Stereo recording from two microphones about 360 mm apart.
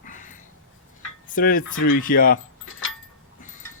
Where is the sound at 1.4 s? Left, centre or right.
Left.